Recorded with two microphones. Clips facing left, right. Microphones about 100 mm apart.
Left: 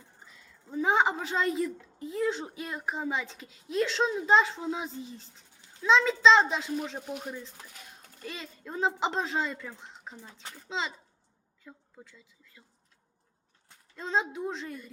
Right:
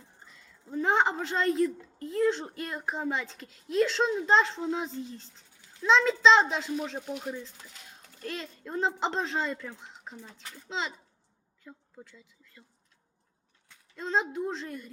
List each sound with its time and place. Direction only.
0.3 s a woman's voice: centre (ahead or behind)
13.9 s a woman's voice: centre (ahead or behind)